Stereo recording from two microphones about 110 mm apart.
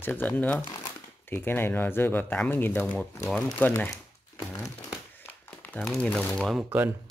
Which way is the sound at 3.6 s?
15° left (ahead or behind).